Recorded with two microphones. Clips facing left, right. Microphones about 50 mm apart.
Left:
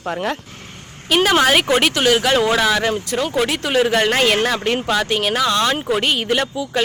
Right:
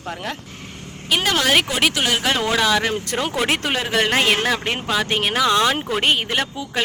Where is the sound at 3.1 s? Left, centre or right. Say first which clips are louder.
Left 2 dB; right.